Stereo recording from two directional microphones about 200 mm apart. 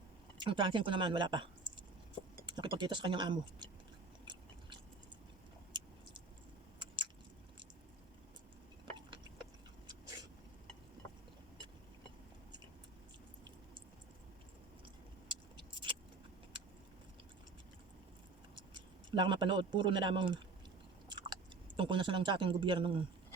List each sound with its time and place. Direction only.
0.3 s speech: 25° right (ahead or behind)
2.5 s speech: 20° right (ahead or behind)
6.7 s a sound: 25° right (ahead or behind)
15.3 s vehicle: 25° right (ahead or behind)
18.5 s speech: 25° right (ahead or behind)
21.1 s chewing: 20° right (ahead or behind)
21.8 s speech: 25° right (ahead or behind)